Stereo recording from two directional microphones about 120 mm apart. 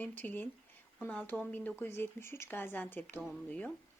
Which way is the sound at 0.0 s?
15° left (ahead or behind).